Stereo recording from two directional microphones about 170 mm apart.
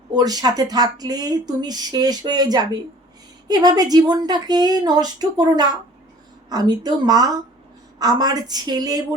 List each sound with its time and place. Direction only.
0.1 s speech: 25° right (ahead or behind)